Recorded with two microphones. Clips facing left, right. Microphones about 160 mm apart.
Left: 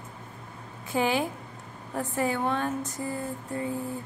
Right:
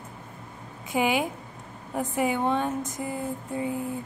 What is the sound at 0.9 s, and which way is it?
Speech, 15° right (ahead or behind).